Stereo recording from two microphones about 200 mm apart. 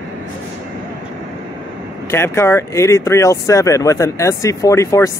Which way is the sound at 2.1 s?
10° left (ahead or behind).